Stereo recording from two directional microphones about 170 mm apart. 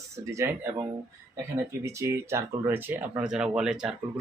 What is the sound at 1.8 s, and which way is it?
Speech, 15° right (ahead or behind).